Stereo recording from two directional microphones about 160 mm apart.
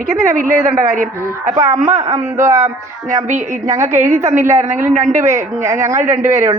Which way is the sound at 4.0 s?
50° right (ahead or behind).